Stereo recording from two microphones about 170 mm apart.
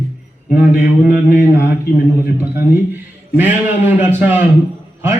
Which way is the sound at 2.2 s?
10° right (ahead or behind).